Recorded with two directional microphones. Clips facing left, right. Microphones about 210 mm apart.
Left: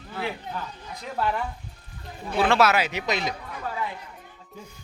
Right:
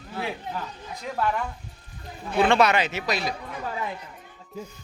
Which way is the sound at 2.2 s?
5° left (ahead or behind).